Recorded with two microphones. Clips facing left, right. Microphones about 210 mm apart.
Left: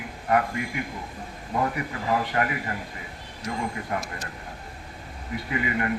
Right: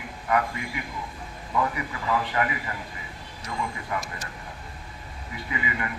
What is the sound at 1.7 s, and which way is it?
A man's voice, 45° left (ahead or behind).